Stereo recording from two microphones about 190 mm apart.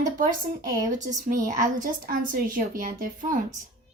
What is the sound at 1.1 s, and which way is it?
A woman's voice, 45° right (ahead or behind).